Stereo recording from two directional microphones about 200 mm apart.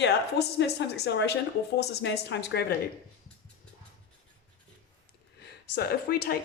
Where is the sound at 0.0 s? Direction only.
60° left (ahead or behind).